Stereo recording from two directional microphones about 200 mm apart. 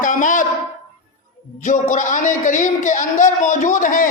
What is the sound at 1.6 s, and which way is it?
A man's voice, 40° left (ahead or behind).